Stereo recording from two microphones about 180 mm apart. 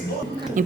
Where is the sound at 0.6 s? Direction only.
45° right (ahead or behind).